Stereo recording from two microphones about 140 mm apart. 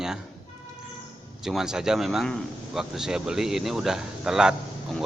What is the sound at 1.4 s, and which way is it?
A man's voice, 5° right (ahead or behind).